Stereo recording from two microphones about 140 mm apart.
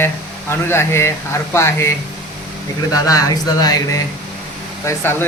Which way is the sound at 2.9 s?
25° left (ahead or behind).